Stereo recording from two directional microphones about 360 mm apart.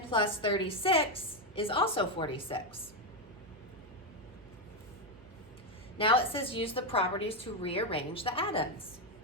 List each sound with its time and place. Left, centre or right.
0.1 s a woman's voice: centre
6.0 s a woman's voice: centre